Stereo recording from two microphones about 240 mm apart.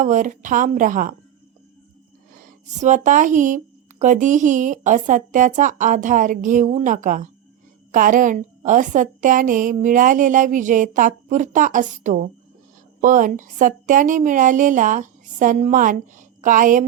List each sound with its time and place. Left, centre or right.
0.0 s speech: right
2.3 s speech: right